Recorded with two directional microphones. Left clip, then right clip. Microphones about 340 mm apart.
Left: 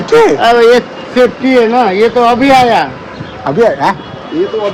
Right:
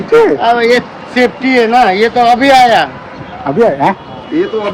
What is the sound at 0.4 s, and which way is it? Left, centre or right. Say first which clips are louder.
A man's voice: left 3 dB; centre.